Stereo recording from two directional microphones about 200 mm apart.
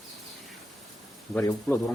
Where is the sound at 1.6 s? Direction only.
Centre (ahead or behind).